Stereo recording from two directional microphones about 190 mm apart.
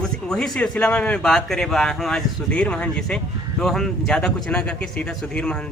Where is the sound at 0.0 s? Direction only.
Centre (ahead or behind).